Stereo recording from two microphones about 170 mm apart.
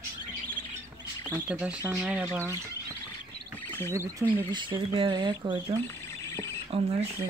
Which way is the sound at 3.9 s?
20° right (ahead or behind).